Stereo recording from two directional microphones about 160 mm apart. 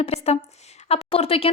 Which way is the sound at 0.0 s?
40° left (ahead or behind).